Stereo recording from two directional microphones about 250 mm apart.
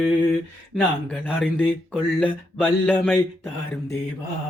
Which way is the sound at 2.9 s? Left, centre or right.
Centre.